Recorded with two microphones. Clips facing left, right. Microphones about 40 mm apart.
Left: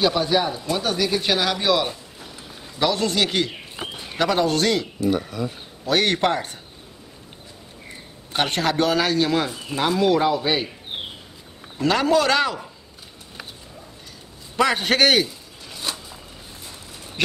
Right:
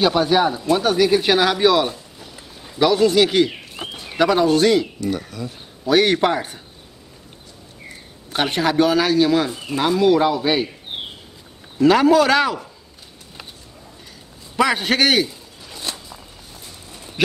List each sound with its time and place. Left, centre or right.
0.0 s speech: centre
2.1 s a sound: centre
2.8 s a man's voice: centre
5.0 s speech: centre
5.9 s a man's voice: centre
8.3 s a man's voice: centre
11.8 s a man's voice: centre
14.6 s a sound: centre